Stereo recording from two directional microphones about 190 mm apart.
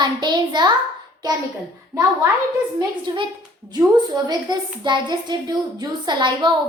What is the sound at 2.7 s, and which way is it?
A woman's voice, 25° right (ahead or behind).